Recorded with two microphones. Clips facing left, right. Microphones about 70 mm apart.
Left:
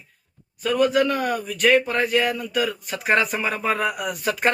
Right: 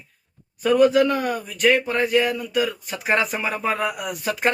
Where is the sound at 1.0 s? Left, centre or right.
Right.